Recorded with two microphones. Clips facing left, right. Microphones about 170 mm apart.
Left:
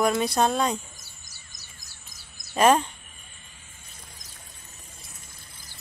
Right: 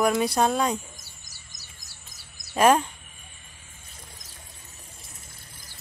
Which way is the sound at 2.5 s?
5° right (ahead or behind).